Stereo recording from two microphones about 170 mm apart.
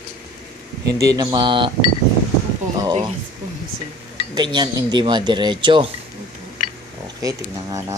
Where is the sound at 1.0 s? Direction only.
25° right (ahead or behind).